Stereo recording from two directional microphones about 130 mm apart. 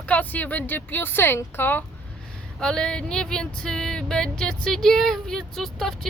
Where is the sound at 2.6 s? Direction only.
5° left (ahead or behind).